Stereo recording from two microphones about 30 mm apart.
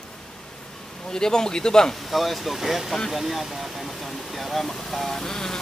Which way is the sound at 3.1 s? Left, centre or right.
Centre.